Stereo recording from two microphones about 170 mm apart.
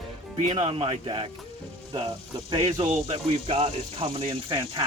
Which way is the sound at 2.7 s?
40° right (ahead or behind).